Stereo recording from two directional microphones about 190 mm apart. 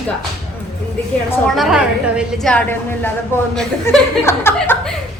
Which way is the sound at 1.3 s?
Centre (ahead or behind).